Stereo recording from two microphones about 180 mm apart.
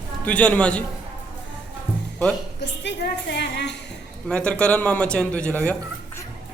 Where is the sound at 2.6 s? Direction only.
70° left (ahead or behind).